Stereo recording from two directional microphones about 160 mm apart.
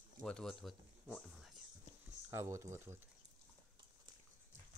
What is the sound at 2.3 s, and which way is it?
Speech, 15° right (ahead or behind).